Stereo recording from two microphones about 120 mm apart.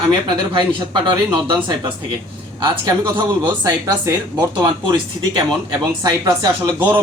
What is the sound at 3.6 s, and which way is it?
A man's voice, 30° right (ahead or behind).